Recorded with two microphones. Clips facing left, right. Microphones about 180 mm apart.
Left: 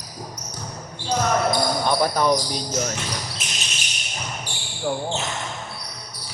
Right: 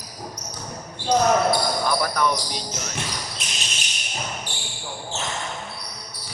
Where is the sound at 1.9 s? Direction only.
30° left (ahead or behind).